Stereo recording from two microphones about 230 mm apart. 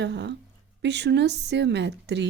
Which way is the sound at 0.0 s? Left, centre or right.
Right.